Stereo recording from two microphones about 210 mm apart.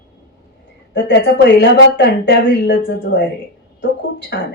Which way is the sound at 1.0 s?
60° left (ahead or behind).